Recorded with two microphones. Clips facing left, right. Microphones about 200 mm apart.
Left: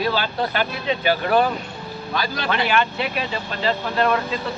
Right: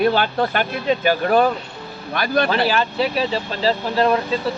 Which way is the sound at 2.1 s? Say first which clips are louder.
Right 7 dB; 60° right (ahead or behind).